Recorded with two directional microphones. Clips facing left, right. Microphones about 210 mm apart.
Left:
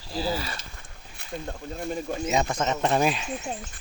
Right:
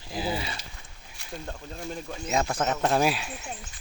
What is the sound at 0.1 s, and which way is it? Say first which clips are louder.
Speech: left 2 dB; 20° right (ahead or behind).